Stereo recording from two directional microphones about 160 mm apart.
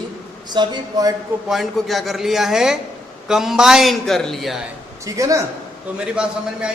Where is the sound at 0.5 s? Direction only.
25° right (ahead or behind).